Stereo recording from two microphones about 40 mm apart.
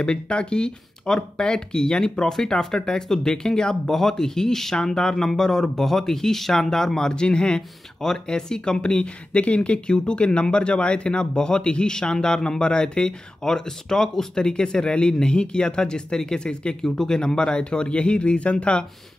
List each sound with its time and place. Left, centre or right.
0.0 s speech: left
16.8 s speech: centre; by 18.9 s left